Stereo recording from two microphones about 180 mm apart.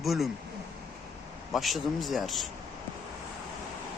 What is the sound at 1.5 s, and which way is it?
Speech, centre (ahead or behind).